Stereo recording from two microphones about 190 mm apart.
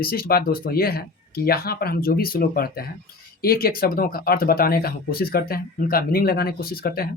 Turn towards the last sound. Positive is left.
turn(degrees=50)  # may be behind; listen again after turning